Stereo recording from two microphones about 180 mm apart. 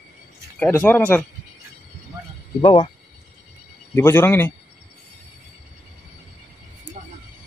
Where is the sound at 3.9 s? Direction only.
15° left (ahead or behind).